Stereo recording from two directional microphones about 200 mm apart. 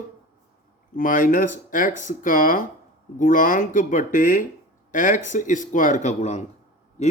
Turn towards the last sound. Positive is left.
turn(degrees=35)  # may be behind; listen again after turning